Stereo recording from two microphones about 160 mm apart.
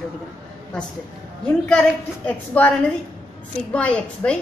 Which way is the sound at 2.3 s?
10° left (ahead or behind).